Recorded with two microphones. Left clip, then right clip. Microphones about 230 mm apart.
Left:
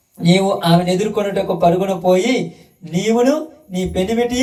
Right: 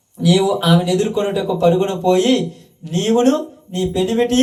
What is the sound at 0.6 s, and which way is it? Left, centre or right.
A man's voice, right.